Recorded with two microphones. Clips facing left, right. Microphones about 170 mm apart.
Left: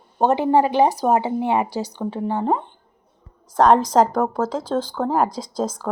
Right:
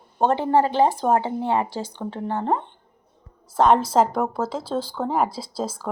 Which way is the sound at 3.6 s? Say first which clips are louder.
Left 2 dB; 5° right (ahead or behind).